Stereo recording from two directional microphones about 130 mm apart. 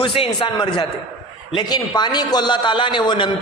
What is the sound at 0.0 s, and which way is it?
A man's voice, 45° left (ahead or behind).